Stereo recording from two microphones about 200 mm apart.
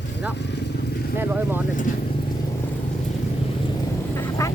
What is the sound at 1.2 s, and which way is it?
Speech, 10° right (ahead or behind).